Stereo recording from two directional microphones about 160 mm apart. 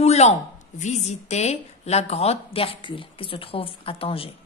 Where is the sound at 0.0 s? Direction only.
40° left (ahead or behind).